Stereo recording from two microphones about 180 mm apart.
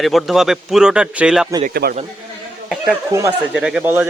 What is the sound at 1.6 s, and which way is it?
Speech, 55° right (ahead or behind).